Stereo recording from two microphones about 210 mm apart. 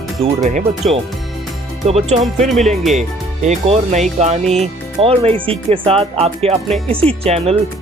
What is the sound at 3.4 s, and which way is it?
Speech, 30° right (ahead or behind).